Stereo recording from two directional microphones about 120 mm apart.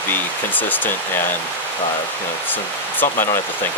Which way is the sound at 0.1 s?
15° left (ahead or behind).